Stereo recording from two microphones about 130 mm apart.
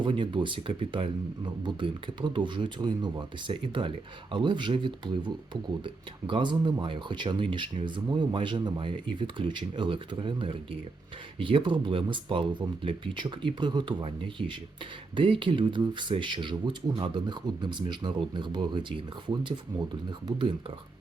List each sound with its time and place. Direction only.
0.0 s speech: 35° right (ahead or behind)